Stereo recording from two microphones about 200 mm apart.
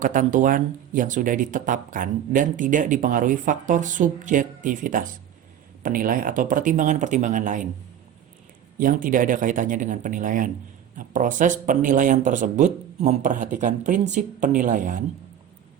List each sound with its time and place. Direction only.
0.0 s speech: 40° right (ahead or behind)
8.8 s speech: 40° right (ahead or behind)